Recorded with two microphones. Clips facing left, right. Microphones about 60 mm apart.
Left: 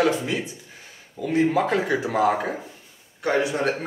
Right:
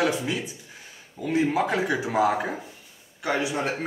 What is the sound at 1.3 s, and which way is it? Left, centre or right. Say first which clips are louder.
Speech: left 3 dB; centre.